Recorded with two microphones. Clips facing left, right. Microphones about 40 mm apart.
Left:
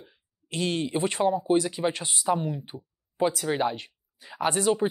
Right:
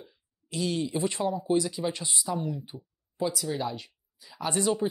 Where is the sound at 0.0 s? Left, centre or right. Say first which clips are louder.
Right 1 dB; left.